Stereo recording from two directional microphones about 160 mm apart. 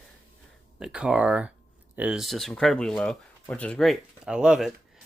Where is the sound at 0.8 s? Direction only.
5° right (ahead or behind).